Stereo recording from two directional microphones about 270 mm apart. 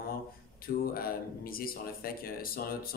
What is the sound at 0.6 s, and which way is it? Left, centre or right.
Speech, left.